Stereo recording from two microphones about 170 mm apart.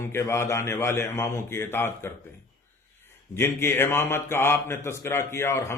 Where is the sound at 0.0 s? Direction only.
15° left (ahead or behind).